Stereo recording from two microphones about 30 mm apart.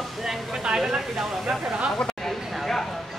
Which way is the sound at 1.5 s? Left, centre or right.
Centre.